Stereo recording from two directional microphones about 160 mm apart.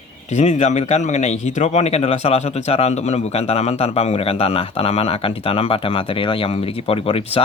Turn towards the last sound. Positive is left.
turn(degrees=35)  # may be behind; listen again after turning